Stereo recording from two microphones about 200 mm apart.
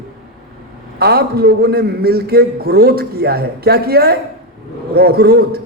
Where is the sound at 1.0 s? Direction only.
50° right (ahead or behind).